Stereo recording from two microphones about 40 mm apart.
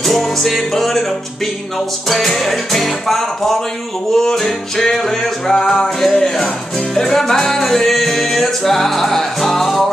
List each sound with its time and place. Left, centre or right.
0.0 s music: centre